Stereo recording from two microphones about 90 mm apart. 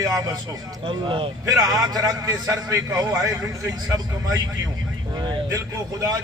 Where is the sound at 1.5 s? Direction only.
45° right (ahead or behind).